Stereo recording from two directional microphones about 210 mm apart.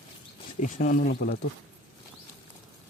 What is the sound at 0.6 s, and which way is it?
Speech, 40° left (ahead or behind).